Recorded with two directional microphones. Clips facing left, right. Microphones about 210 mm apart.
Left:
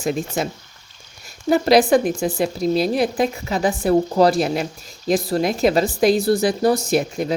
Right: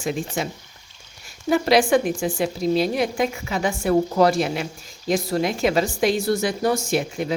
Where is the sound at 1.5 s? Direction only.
40° left (ahead or behind).